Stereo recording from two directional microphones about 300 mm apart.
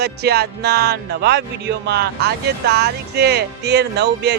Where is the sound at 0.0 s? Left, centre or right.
Right.